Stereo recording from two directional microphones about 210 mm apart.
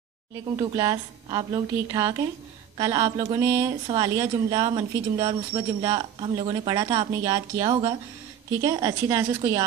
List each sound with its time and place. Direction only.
0.6 s a woman's voice: 20° right (ahead or behind)